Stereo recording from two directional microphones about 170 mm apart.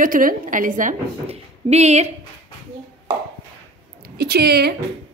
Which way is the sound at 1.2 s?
35° right (ahead or behind).